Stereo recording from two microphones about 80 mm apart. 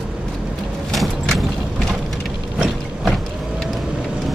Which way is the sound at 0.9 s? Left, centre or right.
Centre.